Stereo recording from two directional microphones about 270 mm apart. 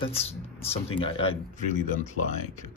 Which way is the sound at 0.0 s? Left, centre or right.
Left.